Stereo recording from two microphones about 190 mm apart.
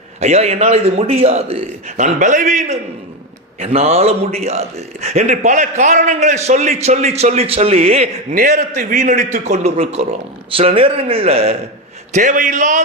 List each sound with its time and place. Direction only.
0.2 s a man's voice: 35° right (ahead or behind)
8.4 s a man's voice: 45° right (ahead or behind)